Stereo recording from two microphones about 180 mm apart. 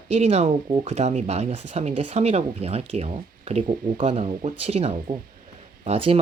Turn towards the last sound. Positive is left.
turn(degrees=-35)  # may be behind; listen again after turning